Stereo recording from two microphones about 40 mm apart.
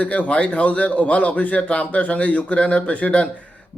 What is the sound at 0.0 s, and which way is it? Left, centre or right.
Speech, left.